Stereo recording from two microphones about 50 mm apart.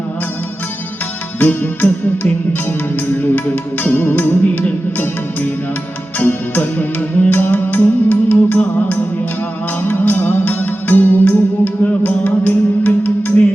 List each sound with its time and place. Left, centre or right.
1.4 s music: left
6.1 s music: left